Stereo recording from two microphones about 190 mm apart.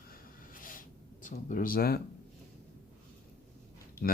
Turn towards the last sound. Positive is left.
turn(degrees=50)  # may be behind; listen again after turning